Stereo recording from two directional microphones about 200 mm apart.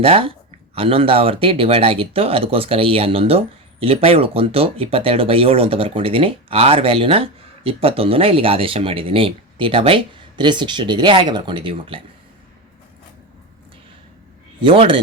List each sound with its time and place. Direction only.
0.0 s speech: 30° right (ahead or behind)
14.6 s speech: 25° right (ahead or behind)